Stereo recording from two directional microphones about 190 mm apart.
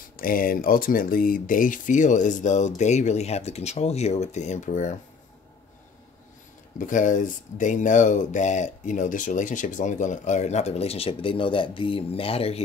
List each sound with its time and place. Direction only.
0.2 s speech: 50° left (ahead or behind)
6.8 s speech: 45° left (ahead or behind)